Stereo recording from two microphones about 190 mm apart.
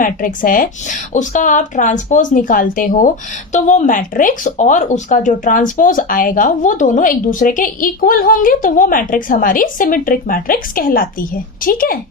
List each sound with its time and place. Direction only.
0.0 s speech: 45° left (ahead or behind)